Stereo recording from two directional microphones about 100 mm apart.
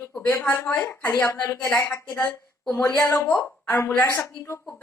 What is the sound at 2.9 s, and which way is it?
A woman's voice, 30° left (ahead or behind).